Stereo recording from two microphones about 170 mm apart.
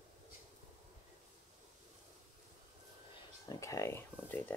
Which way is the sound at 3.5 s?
15° left (ahead or behind).